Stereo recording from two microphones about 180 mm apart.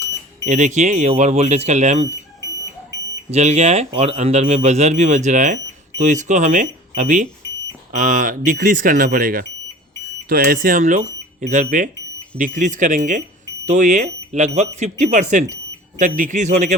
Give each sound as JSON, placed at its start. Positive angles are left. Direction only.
{"t": 0.4, "sound": "speech", "side_deg": -40}
{"t": 3.3, "sound": "speech", "side_deg": -40}